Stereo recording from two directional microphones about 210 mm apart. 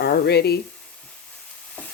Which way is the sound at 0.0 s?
50° left (ahead or behind).